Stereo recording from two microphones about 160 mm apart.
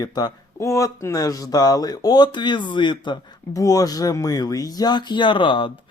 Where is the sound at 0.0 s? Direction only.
25° left (ahead or behind).